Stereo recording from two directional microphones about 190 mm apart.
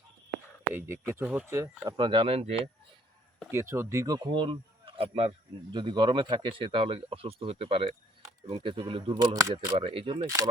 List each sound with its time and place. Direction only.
0.7 s speech: 10° right (ahead or behind); by 2.6 s 30° right (ahead or behind)
3.5 s speech: 15° right (ahead or behind)